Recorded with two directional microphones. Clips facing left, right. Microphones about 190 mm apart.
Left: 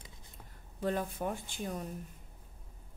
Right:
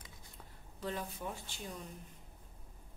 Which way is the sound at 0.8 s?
50° left (ahead or behind).